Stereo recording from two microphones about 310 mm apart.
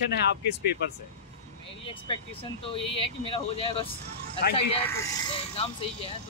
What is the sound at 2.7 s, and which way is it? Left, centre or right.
Speech, centre.